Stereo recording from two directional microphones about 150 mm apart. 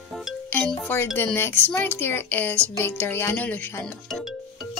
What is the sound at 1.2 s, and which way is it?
Speech, 15° left (ahead or behind).